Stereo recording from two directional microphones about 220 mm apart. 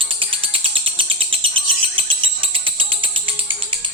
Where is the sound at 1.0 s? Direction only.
25° right (ahead or behind).